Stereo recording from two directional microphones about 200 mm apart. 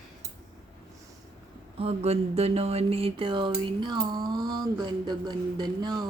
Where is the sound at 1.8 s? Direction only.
30° right (ahead or behind).